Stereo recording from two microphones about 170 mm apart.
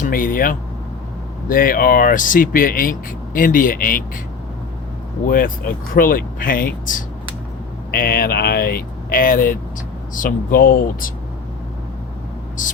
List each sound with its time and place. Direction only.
0.0 s speech: 55° left (ahead or behind)
5.2 s speech: 55° left (ahead or behind)
7.9 s speech: 65° left (ahead or behind)
12.6 s speech: 50° left (ahead or behind)